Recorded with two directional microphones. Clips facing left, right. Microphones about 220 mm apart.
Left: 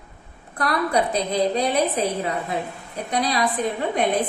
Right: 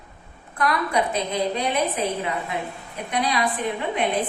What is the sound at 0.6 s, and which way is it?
A woman's voice, 35° left (ahead or behind).